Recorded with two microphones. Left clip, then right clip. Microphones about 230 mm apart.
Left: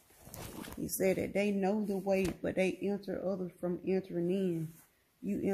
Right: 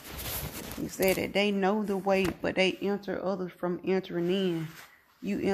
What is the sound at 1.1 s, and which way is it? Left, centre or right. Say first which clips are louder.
Speech: right 6 dB; centre.